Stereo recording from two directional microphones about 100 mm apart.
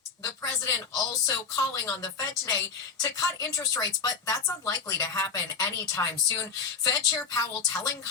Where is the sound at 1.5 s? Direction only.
35° left (ahead or behind).